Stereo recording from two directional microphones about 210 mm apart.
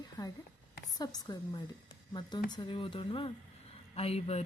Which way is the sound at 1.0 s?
20° left (ahead or behind).